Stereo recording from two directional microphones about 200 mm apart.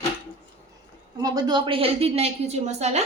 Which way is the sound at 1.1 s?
20° right (ahead or behind).